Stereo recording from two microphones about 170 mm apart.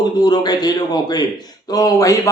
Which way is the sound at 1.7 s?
20° left (ahead or behind).